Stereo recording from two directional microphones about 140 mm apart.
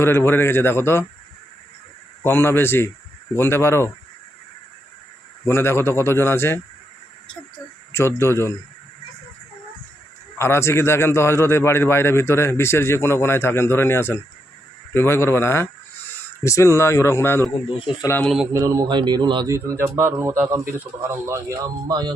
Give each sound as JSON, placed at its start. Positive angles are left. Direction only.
{"t": 0.0, "sound": "a man's voice", "side_deg": 15}
{"t": 2.2, "sound": "a man's voice", "side_deg": 15}
{"t": 5.5, "sound": "a man's voice", "side_deg": 15}
{"t": 7.9, "sound": "speech", "side_deg": 20}
{"t": 10.3, "sound": "a man's voice", "side_deg": 20}
{"t": 18.5, "sound": "speech", "side_deg": -25}
{"t": 19.5, "sound": "speech", "side_deg": -20}